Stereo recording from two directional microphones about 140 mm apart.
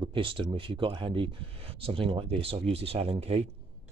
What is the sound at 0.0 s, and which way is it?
Speech, 40° right (ahead or behind).